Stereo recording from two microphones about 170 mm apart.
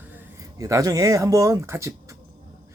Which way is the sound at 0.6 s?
20° right (ahead or behind).